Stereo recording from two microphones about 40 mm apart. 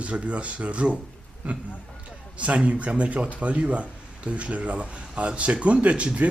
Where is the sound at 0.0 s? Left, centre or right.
Right.